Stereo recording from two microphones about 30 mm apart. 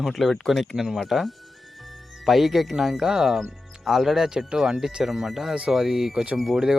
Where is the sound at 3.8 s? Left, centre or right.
Centre.